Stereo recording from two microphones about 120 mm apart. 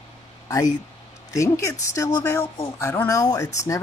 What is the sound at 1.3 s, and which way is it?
Speech, 25° left (ahead or behind).